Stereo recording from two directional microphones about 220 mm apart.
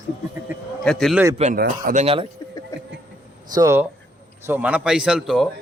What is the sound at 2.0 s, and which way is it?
Speech, 25° right (ahead or behind).